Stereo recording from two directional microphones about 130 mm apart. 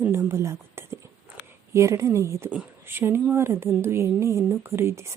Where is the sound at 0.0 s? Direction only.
20° right (ahead or behind).